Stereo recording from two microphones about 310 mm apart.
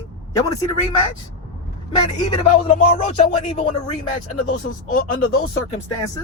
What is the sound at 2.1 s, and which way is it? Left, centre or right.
Speech, centre.